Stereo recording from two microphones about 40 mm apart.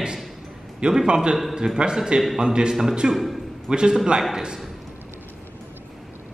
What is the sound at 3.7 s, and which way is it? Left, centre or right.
Speech, right.